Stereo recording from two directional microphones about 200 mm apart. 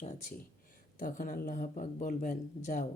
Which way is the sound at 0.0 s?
35° left (ahead or behind).